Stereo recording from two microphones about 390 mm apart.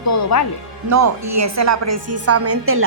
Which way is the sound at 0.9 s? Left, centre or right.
Right.